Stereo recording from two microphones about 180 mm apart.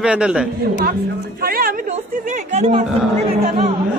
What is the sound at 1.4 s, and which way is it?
Speech, 55° right (ahead or behind).